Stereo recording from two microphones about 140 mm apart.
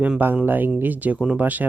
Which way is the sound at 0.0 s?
10° right (ahead or behind).